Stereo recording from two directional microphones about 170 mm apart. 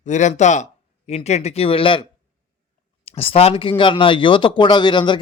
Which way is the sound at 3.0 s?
35° left (ahead or behind).